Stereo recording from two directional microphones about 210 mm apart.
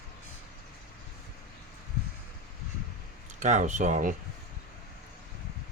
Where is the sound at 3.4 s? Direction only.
35° right (ahead or behind).